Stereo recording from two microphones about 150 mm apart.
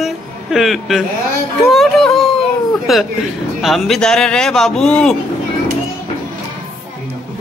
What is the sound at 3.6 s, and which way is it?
Speech, centre (ahead or behind).